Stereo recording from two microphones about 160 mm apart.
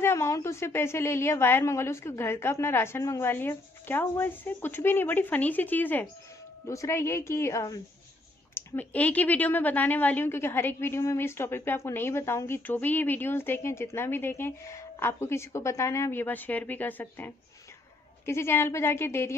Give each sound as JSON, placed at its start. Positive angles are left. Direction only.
{"t": 0.0, "sound": "a woman's voice", "side_deg": 15}
{"t": 8.5, "sound": "a woman's voice", "side_deg": 10}